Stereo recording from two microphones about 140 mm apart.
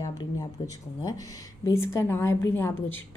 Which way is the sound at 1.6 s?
20° left (ahead or behind).